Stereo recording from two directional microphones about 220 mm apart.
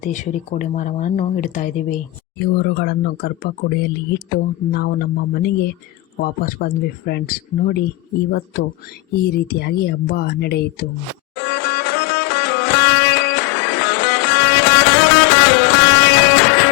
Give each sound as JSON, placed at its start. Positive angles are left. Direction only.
{"t": 0.0, "sound": "speech", "side_deg": 35}
{"t": 2.4, "sound": "speech", "side_deg": 45}
{"t": 9.2, "sound": "speech", "side_deg": 45}
{"t": 11.3, "sound": "music", "side_deg": 45}